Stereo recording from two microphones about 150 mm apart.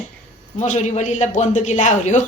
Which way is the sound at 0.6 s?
50° left (ahead or behind).